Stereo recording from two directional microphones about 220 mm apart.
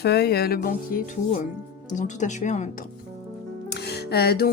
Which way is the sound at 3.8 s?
45° left (ahead or behind).